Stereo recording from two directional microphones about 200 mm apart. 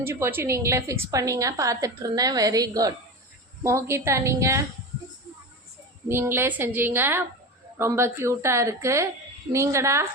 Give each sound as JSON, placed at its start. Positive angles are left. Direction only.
{"t": 0.0, "sound": "a woman's voice", "side_deg": -10}
{"t": 6.1, "sound": "a woman's voice", "side_deg": -10}